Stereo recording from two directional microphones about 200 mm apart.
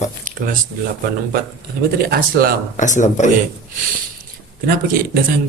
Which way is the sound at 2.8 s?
40° left (ahead or behind).